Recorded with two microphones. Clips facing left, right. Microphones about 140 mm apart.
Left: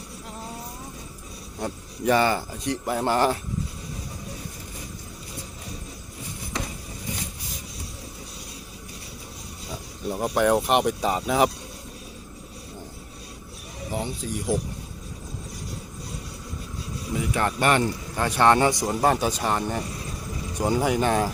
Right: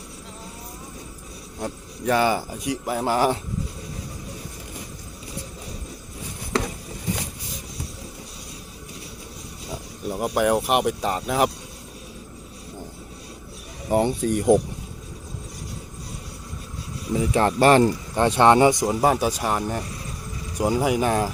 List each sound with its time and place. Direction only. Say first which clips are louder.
1.5 s speech: even; centre (ahead or behind)
10.1 s speech: even; 5° right (ahead or behind)
13.9 s speech: right 10 dB; 60° right (ahead or behind)
17.2 s speech: right 6 dB; 30° right (ahead or behind)
18.2 s a man's voice: right 4 dB; 20° right (ahead or behind)
19.0 s speech: right 1 dB; 5° right (ahead or behind)